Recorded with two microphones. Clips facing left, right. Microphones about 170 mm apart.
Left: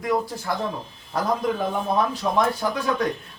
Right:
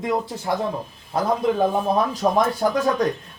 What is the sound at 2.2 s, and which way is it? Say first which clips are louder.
Speech: right 3 dB; 40° right (ahead or behind).